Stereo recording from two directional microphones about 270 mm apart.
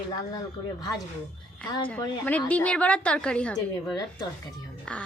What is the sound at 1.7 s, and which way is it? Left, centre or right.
Speech, centre.